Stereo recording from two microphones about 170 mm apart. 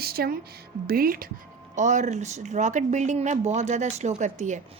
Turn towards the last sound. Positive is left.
turn(degrees=-45)  # may be behind; listen again after turning